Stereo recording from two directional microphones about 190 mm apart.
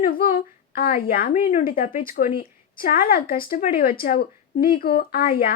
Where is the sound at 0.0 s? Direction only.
50° left (ahead or behind).